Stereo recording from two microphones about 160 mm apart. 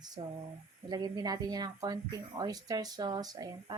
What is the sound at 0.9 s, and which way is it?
Speech, 25° right (ahead or behind).